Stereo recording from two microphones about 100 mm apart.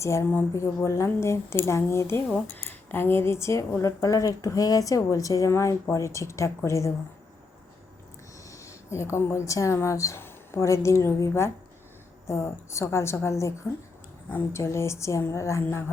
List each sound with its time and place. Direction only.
0.0 s a woman's voice: 30° left (ahead or behind)
8.4 s a woman's voice: 30° left (ahead or behind)